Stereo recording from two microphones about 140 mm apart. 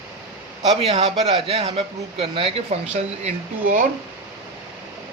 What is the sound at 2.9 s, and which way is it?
Speech, 60° right (ahead or behind).